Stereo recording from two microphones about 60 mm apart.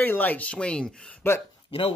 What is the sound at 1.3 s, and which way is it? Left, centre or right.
Speech, left.